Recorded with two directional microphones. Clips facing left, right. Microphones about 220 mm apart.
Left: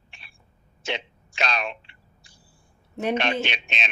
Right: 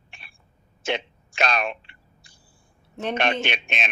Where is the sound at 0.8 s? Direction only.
50° right (ahead or behind).